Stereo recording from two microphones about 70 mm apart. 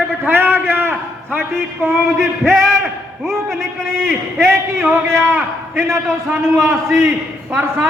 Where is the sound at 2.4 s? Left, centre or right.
Centre.